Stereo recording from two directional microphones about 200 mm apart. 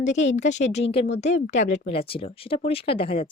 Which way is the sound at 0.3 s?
35° left (ahead or behind).